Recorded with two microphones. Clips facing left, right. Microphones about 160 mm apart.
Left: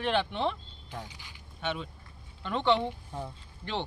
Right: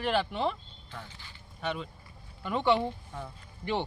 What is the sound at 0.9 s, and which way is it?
Speech, 15° left (ahead or behind).